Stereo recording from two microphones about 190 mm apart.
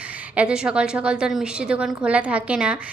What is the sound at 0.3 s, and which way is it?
A woman's voice, 5° right (ahead or behind).